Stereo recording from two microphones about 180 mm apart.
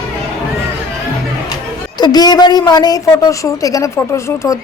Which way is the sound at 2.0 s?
20° left (ahead or behind).